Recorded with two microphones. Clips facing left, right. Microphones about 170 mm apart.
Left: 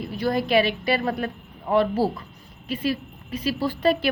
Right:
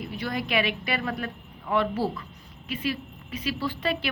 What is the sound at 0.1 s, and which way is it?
A woman's voice, 35° left (ahead or behind).